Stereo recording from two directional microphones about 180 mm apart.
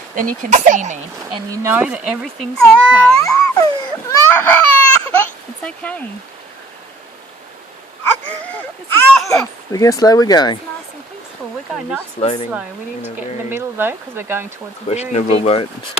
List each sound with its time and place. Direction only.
0.2 s speech: 45° right (ahead or behind)
1.5 s speech: 15° right (ahead or behind)
3.2 s music: 20° left (ahead or behind)
4.1 s baby cry: 10° left (ahead or behind)
8.3 s a sound: 10° left (ahead or behind)
9.7 s speech: 20° left (ahead or behind)
12.2 s speech: 35° left (ahead or behind)
12.5 s speech: 10° right (ahead or behind)
14.8 s speech: 35° left (ahead or behind)